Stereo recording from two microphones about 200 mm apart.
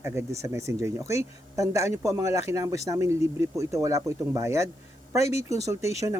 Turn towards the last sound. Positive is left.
turn(degrees=-15)  # may be behind; listen again after turning